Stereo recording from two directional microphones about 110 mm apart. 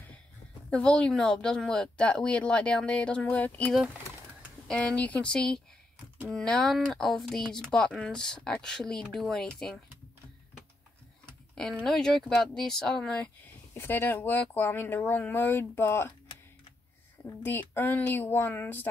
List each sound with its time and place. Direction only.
0.7 s speech: 10° left (ahead or behind)
11.8 s speech: 5° left (ahead or behind); by 16.1 s 20° left (ahead or behind)
17.2 s speech: 20° left (ahead or behind)